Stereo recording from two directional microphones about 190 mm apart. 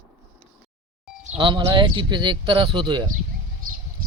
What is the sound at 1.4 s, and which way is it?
Speech, 25° right (ahead or behind).